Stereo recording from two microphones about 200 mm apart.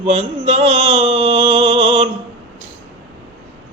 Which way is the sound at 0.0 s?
30° right (ahead or behind).